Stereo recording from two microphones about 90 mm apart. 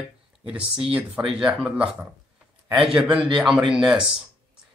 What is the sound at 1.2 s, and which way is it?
A man's voice, 10° right (ahead or behind).